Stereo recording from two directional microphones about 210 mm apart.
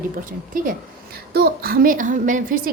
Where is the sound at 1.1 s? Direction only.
45° right (ahead or behind).